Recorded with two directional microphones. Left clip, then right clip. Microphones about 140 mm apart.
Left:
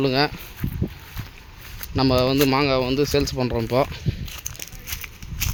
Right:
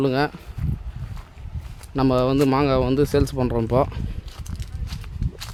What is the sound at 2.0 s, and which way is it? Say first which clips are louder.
Speech: even; 15° right (ahead or behind).